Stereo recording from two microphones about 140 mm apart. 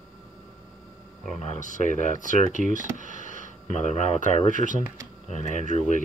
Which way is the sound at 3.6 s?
60° left (ahead or behind).